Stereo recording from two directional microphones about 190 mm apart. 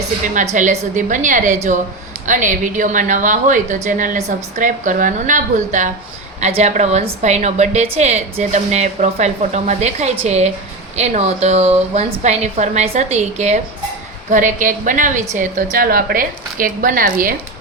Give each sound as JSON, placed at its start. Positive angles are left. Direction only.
{"t": 0.5, "sound": "a woman's voice", "side_deg": -40}